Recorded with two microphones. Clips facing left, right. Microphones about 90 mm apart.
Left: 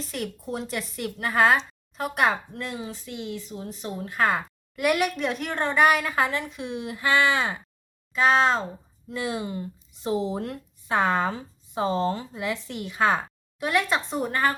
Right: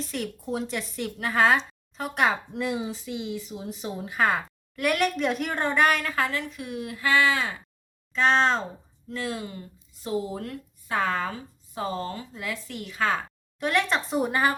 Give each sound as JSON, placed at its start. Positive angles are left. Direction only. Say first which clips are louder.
{"t": 0.0, "sound": "speech", "louder": "even", "side_deg": 0}
{"t": 2.5, "sound": "speech", "louder": "right 5 dB", "side_deg": -10}
{"t": 8.1, "sound": "speech", "louder": "left 1 dB", "side_deg": 5}
{"t": 9.0, "sound": "speech", "louder": "left 3 dB", "side_deg": 20}
{"t": 13.6, "sound": "speech", "louder": "even", "side_deg": 5}